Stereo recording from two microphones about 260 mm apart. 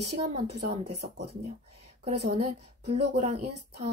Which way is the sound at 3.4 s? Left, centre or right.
Right.